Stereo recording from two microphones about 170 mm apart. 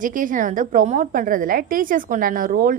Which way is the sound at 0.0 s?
50° right (ahead or behind).